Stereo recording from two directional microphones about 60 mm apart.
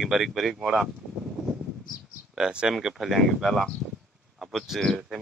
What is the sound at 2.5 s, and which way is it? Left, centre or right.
Speech, centre.